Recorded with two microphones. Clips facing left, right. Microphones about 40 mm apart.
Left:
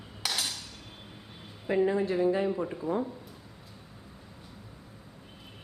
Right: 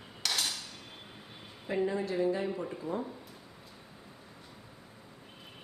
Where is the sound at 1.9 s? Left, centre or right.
Left.